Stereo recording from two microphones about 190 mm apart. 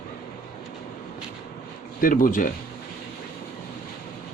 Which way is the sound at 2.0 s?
45° left (ahead or behind).